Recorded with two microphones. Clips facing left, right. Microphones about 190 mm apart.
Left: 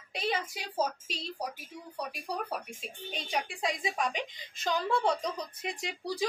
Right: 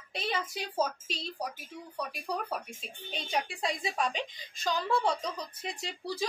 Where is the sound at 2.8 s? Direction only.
15° left (ahead or behind).